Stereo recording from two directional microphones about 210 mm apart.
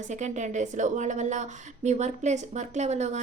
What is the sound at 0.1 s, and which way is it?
A woman's voice, 35° right (ahead or behind).